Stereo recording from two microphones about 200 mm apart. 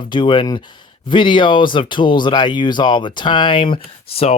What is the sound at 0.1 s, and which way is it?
Speech, 25° left (ahead or behind).